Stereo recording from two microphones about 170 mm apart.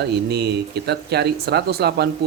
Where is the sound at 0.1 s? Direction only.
75° right (ahead or behind).